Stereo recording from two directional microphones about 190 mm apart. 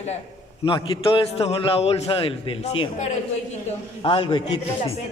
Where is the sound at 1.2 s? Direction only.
30° left (ahead or behind).